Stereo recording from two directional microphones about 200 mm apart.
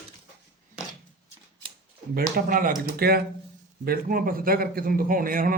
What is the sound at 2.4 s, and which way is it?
A man's voice, 45° right (ahead or behind).